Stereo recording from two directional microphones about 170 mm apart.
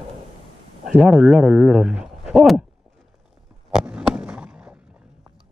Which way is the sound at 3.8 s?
5° right (ahead or behind).